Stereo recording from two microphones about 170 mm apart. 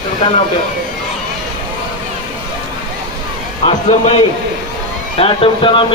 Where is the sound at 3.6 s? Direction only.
35° left (ahead or behind).